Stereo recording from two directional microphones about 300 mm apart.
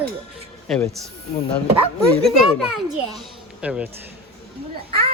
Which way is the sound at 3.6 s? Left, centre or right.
Centre.